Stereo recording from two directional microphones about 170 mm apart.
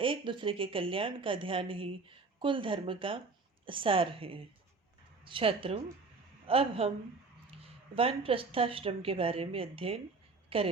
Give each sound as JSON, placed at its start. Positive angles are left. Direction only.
{"t": 0.0, "sound": "a woman's voice", "side_deg": -30}